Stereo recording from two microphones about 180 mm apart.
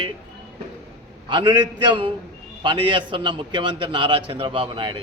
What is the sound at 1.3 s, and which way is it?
A man's voice, 25° right (ahead or behind).